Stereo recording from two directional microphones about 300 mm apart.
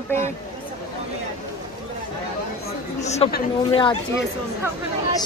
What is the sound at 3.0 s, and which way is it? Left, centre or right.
Speech, left.